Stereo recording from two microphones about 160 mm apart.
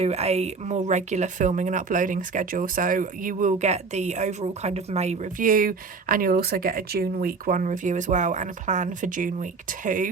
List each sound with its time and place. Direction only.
0.0 s speech: 40° right (ahead or behind)